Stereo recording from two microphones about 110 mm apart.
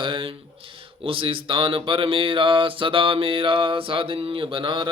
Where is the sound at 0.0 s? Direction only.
50° right (ahead or behind).